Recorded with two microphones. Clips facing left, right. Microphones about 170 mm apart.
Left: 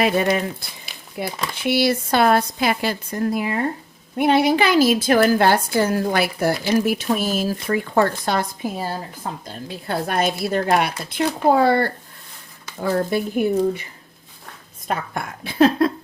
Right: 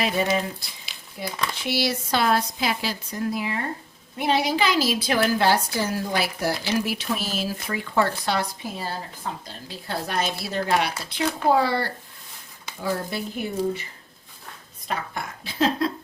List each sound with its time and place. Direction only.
0.0 s a woman's voice: 60° left (ahead or behind)
14.8 s speech: 55° left (ahead or behind)